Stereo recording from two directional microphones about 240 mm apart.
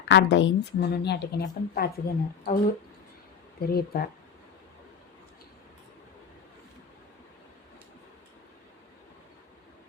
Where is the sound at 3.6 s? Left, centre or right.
Left.